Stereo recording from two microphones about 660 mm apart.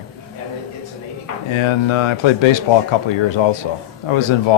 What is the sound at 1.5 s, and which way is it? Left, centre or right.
Speech, left.